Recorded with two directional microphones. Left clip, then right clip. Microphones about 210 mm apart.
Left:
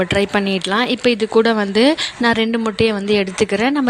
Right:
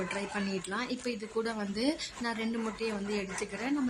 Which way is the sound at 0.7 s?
40° left (ahead or behind).